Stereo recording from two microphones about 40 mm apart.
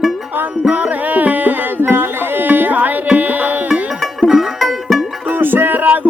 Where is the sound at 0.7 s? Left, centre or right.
Right.